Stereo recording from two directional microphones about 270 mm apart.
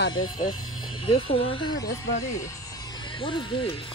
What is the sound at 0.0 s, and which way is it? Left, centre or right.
Speech, left.